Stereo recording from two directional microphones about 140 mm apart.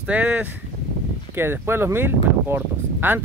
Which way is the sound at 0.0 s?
10° right (ahead or behind).